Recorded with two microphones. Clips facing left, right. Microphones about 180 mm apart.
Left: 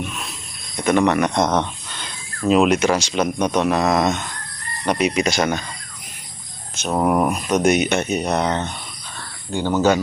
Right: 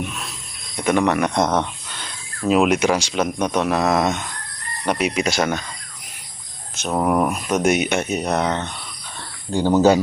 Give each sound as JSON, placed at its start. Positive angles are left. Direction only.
{"t": 0.8, "sound": "speech", "side_deg": -5}
{"t": 6.7, "sound": "speech", "side_deg": 5}
{"t": 9.5, "sound": "speech", "side_deg": -35}